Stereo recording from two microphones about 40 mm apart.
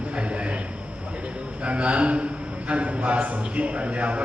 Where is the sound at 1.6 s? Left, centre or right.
Right.